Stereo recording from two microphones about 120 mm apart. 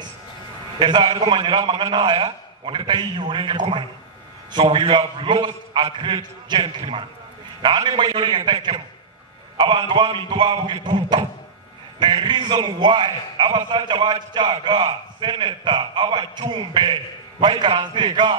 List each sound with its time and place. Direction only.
0.7 s a man's voice: 40° right (ahead or behind)